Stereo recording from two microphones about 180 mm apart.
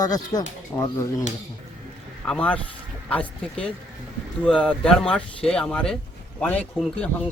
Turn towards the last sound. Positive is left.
turn(degrees=5)  # may be behind; listen again after turning